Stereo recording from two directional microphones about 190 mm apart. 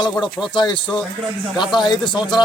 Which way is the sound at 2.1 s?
25° left (ahead or behind).